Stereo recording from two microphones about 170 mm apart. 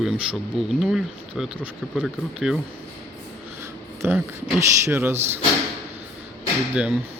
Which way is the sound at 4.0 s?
10° right (ahead or behind).